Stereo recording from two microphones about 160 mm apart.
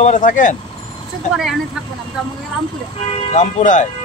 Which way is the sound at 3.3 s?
50° left (ahead or behind).